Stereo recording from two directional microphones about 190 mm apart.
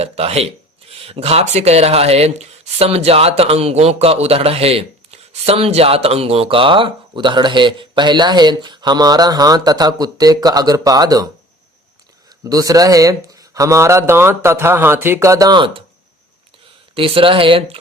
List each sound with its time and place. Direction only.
0.0 s speech: 35° right (ahead or behind)
12.5 s speech: 20° right (ahead or behind)
16.9 s speech: 30° right (ahead or behind)